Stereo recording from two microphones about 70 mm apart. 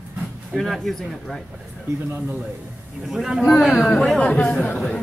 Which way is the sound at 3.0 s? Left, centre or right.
Centre.